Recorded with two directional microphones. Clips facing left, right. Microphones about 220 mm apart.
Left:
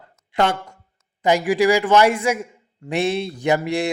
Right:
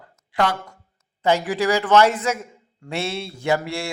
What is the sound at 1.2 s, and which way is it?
A man's voice, 15° left (ahead or behind).